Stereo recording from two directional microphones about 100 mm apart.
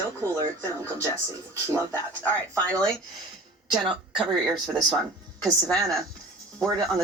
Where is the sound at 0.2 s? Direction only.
30° right (ahead or behind).